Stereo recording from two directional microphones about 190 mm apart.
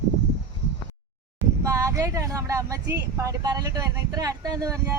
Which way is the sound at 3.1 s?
15° right (ahead or behind).